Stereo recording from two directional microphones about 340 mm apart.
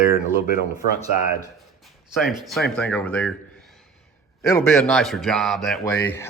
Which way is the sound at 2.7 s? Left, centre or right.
Centre.